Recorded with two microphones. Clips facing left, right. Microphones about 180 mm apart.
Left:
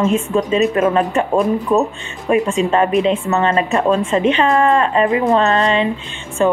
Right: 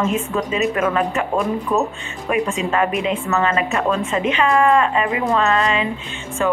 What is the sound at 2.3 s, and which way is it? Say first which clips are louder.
A woman's voice: left 5 dB; 30° left (ahead or behind).